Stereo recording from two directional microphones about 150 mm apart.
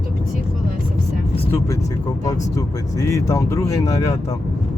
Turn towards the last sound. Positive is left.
turn(degrees=20)  # may be behind; listen again after turning